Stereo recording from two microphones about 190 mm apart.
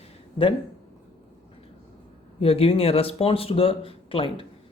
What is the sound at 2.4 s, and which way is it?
Speech, 30° left (ahead or behind).